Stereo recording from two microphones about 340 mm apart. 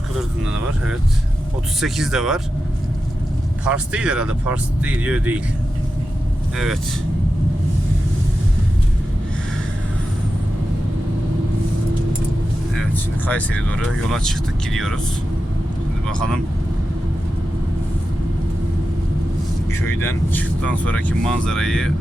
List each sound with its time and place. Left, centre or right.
1.8 s speech: centre
3.6 s speech: centre
13.2 s speech: centre
16.0 s speech: centre
19.7 s speech: centre